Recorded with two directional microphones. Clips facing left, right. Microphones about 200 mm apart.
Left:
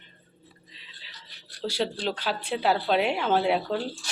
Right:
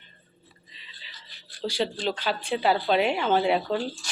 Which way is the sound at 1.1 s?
65° left (ahead or behind).